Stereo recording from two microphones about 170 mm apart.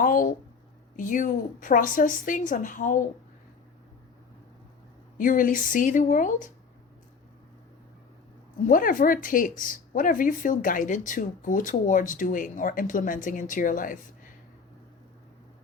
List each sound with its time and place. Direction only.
0.0 s a woman's voice: 55° left (ahead or behind)
5.1 s a woman's voice: 55° left (ahead or behind)
8.6 s a woman's voice: 55° left (ahead or behind)